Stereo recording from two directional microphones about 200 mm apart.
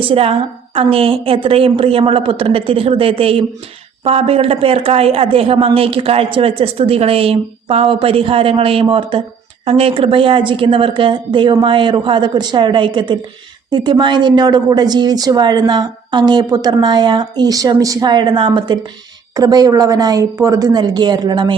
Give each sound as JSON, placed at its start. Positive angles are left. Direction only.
{"t": 0.0, "sound": "a woman's voice", "side_deg": -30}